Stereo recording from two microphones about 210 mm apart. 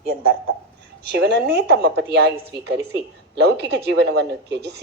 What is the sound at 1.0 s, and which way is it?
A man's voice, 55° right (ahead or behind).